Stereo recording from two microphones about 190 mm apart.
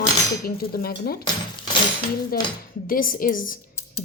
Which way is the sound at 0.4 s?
50° left (ahead or behind).